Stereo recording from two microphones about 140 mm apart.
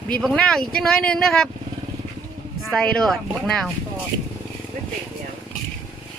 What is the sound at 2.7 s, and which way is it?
Speech, 5° left (ahead or behind).